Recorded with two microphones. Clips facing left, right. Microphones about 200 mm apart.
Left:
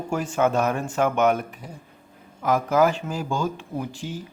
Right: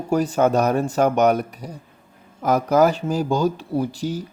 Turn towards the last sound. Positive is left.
turn(degrees=-40)  # may be behind; listen again after turning